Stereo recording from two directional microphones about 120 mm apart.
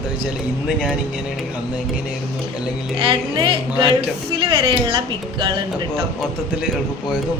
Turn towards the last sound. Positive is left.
turn(degrees=-45)  # may be behind; listen again after turning